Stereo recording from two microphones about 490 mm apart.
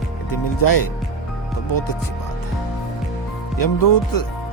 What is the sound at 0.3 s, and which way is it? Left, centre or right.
Music, left.